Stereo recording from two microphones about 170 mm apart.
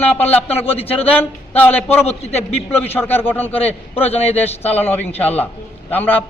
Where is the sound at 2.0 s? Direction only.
40° left (ahead or behind).